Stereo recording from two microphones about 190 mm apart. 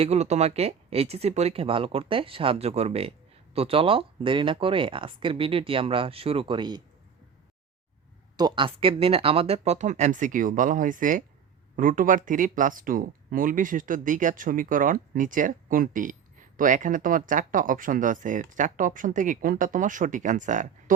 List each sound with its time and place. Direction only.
0.0 s speech: 35° right (ahead or behind)
8.4 s speech: 25° right (ahead or behind); by 20.9 s 40° right (ahead or behind)